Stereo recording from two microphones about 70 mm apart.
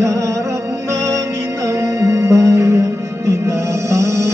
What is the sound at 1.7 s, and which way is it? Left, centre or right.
Music, right.